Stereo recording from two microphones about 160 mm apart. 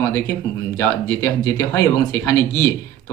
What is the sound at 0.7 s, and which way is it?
Speech, 15° left (ahead or behind).